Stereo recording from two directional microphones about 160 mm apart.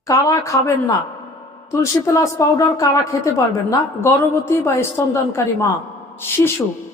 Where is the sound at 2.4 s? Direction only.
20° left (ahead or behind).